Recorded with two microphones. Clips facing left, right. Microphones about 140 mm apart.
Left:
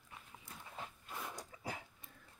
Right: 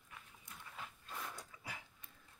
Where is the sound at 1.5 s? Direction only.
35° left (ahead or behind).